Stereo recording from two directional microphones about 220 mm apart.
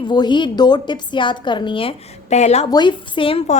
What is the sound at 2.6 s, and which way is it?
Speech, 20° left (ahead or behind).